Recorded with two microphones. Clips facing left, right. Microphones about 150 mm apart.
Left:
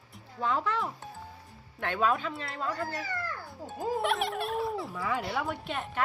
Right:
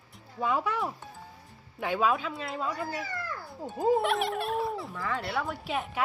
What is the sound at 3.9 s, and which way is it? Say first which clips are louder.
Speech: right 2 dB; centre (ahead or behind).